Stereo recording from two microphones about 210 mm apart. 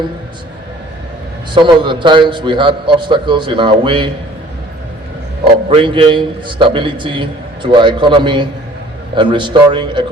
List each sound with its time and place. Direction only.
1.5 s a man's voice: 20° right (ahead or behind)
5.6 s a man's voice: 25° right (ahead or behind)